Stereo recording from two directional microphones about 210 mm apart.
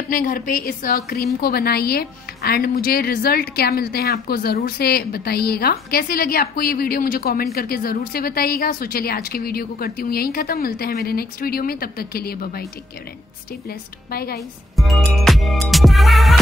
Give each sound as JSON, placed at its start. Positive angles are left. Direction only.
{"t": 0.1, "sound": "a woman's voice", "side_deg": 40}
{"t": 13.7, "sound": "a woman's voice", "side_deg": 45}
{"t": 14.8, "sound": "music", "side_deg": 0}